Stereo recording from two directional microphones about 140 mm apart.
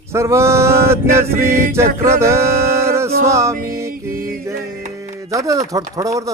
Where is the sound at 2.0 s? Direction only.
20° right (ahead or behind).